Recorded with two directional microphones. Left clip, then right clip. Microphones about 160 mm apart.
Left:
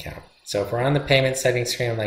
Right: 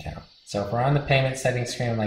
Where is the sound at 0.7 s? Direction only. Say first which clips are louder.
Left 2 dB; 20° left (ahead or behind).